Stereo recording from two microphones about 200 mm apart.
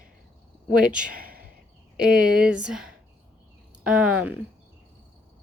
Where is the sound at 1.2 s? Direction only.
45° right (ahead or behind).